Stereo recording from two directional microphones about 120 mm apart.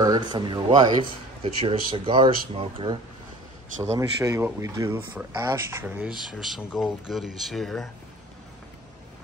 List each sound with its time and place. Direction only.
0.0 s speech: 35° right (ahead or behind)
1.4 s speech: 50° right (ahead or behind)
3.9 s speech: 25° right (ahead or behind)
6.4 s speech: centre (ahead or behind)